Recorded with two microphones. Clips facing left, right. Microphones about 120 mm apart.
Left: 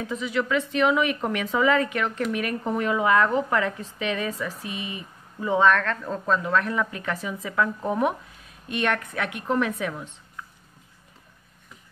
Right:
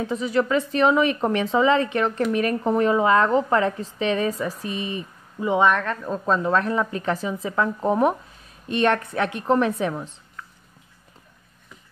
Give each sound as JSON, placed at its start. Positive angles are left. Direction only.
{"t": 0.0, "sound": "speech", "side_deg": -35}
{"t": 5.4, "sound": "speech", "side_deg": -20}
{"t": 6.2, "sound": "speech", "side_deg": -30}